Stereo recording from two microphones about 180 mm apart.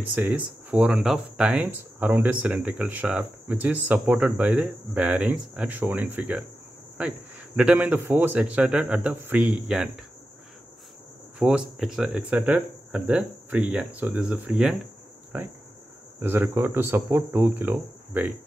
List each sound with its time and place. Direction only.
0.1 s speech: 5° right (ahead or behind)
11.3 s speech: 5° right (ahead or behind)